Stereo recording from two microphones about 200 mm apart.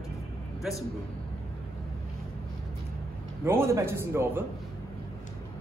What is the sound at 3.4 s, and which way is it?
A man's voice, 15° right (ahead or behind).